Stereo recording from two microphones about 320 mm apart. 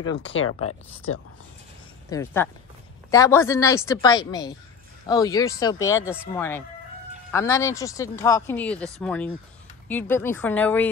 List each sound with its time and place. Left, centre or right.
0.2 s speech: left
2.0 s speech: centre